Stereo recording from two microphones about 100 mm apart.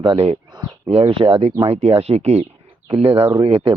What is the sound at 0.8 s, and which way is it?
Speech, 85° right.